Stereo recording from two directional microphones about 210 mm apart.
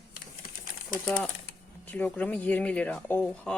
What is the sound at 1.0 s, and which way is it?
Speech, 5° left (ahead or behind).